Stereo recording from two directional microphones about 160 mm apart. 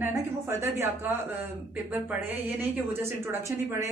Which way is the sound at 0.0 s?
15° right (ahead or behind).